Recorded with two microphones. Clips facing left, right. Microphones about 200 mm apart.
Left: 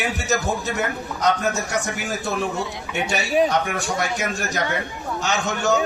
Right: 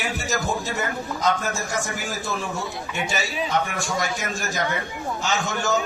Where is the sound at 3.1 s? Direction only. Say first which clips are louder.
Left 11 dB; 50° left (ahead or behind).